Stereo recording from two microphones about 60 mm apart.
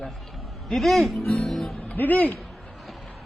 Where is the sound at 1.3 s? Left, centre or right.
Centre.